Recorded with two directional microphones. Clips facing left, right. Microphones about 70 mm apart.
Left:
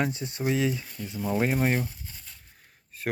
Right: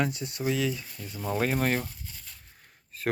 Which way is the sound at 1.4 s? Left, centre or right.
Centre.